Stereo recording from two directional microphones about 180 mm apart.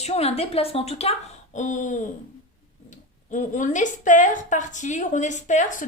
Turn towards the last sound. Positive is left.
turn(degrees=40)  # may be behind; listen again after turning